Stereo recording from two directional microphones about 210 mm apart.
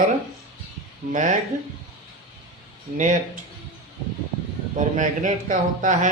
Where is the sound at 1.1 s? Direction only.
35° right (ahead or behind).